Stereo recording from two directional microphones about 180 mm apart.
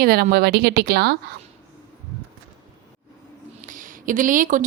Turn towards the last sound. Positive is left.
turn(degrees=-45)  # may be behind; listen again after turning